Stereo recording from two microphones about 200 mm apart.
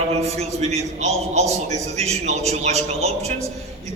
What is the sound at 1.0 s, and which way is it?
Speech, 35° right (ahead or behind).